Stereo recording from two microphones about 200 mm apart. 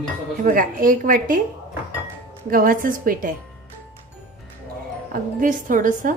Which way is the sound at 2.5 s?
45° right (ahead or behind).